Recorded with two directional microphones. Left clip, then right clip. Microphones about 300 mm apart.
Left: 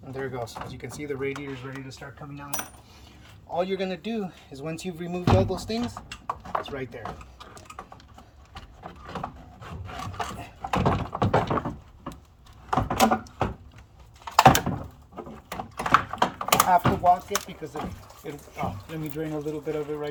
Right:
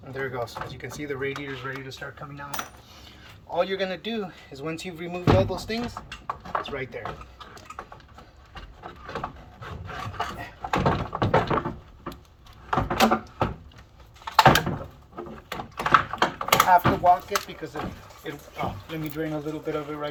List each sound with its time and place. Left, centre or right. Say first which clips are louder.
0.1 s speech: right 2 dB; left
7.0 s a sound: right 2 dB; left
8.5 s wood: right 1 dB; left
12.7 s door: right 1 dB; left